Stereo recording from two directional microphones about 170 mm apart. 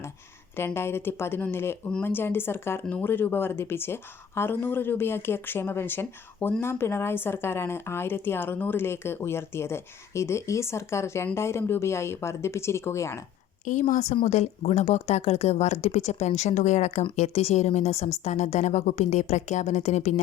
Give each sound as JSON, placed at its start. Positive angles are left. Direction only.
{"t": 0.5, "sound": "speech", "side_deg": 15}
{"t": 13.7, "sound": "speech", "side_deg": 45}